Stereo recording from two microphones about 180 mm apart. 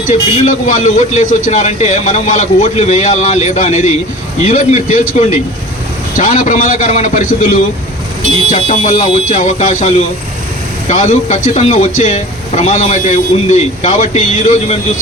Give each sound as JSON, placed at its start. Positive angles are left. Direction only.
{"t": 0.1, "sound": "a man's voice", "side_deg": 40}
{"t": 8.4, "sound": "speech", "side_deg": 40}